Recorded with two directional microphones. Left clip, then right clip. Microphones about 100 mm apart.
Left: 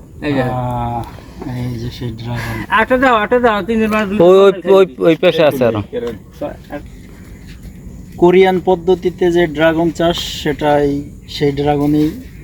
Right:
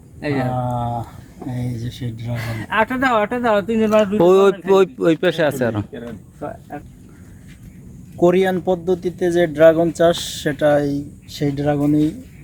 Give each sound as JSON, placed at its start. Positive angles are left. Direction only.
{"t": 0.2, "sound": "a man's voice", "side_deg": -25}
{"t": 1.6, "sound": "speech", "side_deg": -40}
{"t": 4.2, "sound": "a man's voice", "side_deg": -25}
{"t": 8.2, "sound": "speech", "side_deg": -30}